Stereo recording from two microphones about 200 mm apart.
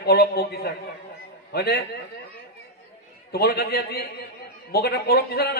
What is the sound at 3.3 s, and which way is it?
A man's voice, 50° left (ahead or behind).